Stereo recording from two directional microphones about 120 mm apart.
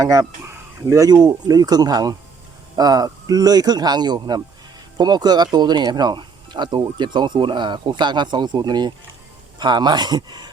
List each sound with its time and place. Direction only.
0.0 s speech: 25° right (ahead or behind)